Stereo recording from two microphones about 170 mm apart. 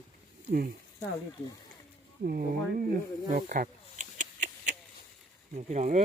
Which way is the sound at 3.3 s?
55° right (ahead or behind).